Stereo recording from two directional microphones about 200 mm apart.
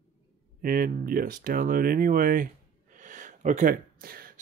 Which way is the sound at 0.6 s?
45° right (ahead or behind).